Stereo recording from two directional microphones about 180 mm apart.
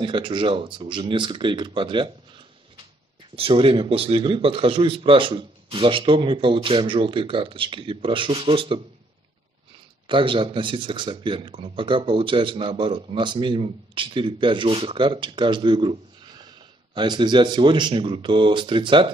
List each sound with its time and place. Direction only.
0.0 s speech: 25° right (ahead or behind)
3.3 s speech: 30° right (ahead or behind)
10.0 s speech: 30° right (ahead or behind)